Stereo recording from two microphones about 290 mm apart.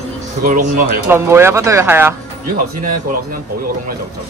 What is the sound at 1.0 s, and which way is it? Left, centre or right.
Speech, centre.